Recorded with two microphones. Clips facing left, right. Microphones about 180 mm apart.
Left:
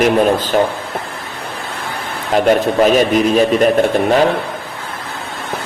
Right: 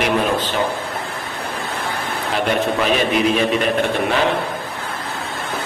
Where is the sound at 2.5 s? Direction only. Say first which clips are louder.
Left 7 dB; 45° left (ahead or behind).